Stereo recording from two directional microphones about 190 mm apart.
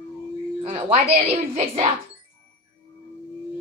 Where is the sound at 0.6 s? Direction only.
35° right (ahead or behind).